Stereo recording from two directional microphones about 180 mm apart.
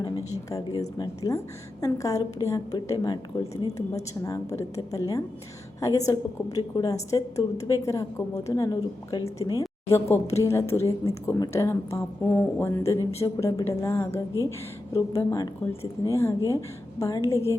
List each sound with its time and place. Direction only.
0.5 s a woman's voice: 20° left (ahead or behind)